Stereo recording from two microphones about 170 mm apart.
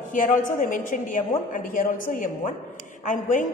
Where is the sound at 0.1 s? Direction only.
50° left (ahead or behind).